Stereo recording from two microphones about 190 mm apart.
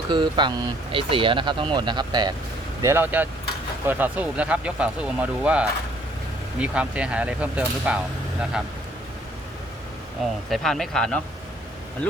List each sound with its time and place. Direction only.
0.1 s speech: 25° right (ahead or behind)
2.8 s speech: 10° right (ahead or behind)
10.5 s speech: centre (ahead or behind)